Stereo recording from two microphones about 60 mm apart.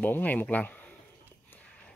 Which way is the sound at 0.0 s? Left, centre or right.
Left.